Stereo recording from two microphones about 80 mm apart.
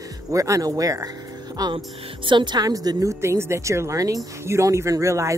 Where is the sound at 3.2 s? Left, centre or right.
Right.